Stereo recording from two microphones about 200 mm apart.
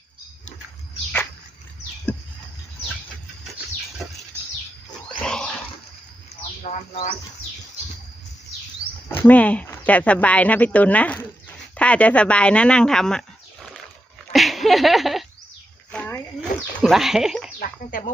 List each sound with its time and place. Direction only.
5.2 s wild animals: 5° left (ahead or behind)
6.6 s speech: 35° left (ahead or behind)
9.2 s speech: 5° left (ahead or behind)
14.3 s a sound: centre (ahead or behind)
15.9 s goat: 10° left (ahead or behind)
17.6 s speech: 40° left (ahead or behind)